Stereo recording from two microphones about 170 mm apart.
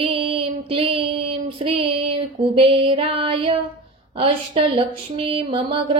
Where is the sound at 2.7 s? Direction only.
30° right (ahead or behind).